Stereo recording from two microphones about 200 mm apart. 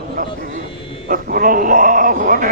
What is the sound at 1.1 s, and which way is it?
A man's voice, 45° right (ahead or behind).